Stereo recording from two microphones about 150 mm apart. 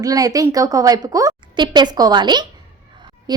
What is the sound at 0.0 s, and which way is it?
A woman's voice, 25° right (ahead or behind).